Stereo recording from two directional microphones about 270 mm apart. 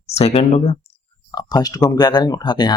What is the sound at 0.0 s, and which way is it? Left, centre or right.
Speech, left.